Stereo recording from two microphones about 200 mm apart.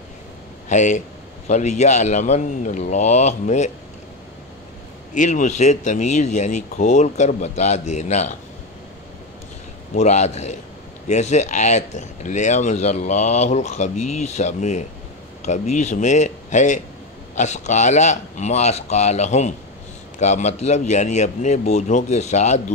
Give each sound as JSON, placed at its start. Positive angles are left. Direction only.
{"t": 0.7, "sound": "speech", "side_deg": 35}
{"t": 5.1, "sound": "speech", "side_deg": 40}
{"t": 9.9, "sound": "speech", "side_deg": 35}